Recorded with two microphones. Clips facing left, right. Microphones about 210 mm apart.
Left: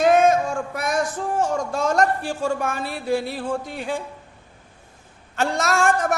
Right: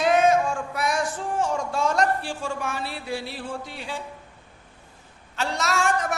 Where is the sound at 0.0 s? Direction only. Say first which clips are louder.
Left 3 dB; 45° left (ahead or behind).